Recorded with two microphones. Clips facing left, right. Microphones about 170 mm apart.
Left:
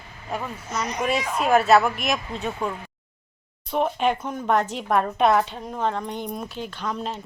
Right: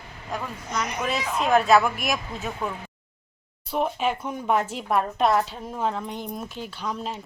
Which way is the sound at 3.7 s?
5° right (ahead or behind).